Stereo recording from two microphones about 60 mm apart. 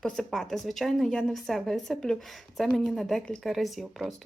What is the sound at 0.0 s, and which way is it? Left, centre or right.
A woman's voice, centre.